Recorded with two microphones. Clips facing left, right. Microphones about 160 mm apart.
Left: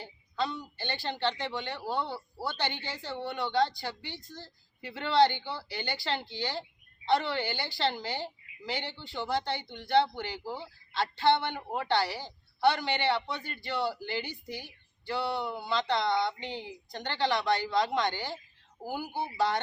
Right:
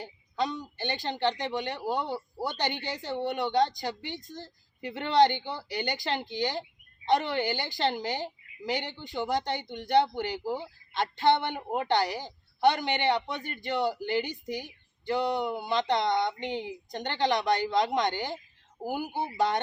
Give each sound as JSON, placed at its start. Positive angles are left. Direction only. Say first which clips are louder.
{"t": 0.0, "sound": "speech", "louder": "right 2 dB", "side_deg": -15}